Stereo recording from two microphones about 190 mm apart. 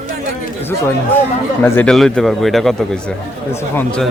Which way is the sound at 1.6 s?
10° left (ahead or behind).